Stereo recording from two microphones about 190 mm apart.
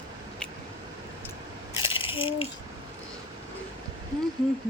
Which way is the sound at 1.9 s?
25° left (ahead or behind).